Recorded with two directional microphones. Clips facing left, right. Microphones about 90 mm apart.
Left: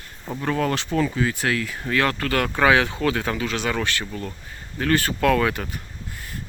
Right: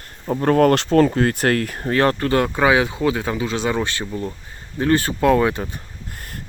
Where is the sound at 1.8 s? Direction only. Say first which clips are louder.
Right 5 dB; 35° right (ahead or behind).